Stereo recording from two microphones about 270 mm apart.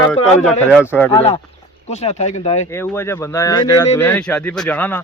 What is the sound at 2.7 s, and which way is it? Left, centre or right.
Speech, centre.